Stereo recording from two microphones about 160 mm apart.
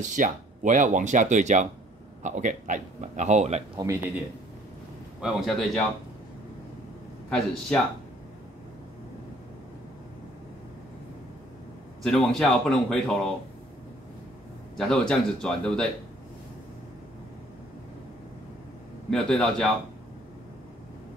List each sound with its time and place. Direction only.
0.0 s speech: 55° right (ahead or behind)
3.7 s speech: 20° right (ahead or behind)
5.2 s speech: centre (ahead or behind)
7.2 s speech: 5° left (ahead or behind)
12.0 s speech: 5° left (ahead or behind)
14.8 s speech: 5° left (ahead or behind)
19.0 s speech: 5° left (ahead or behind)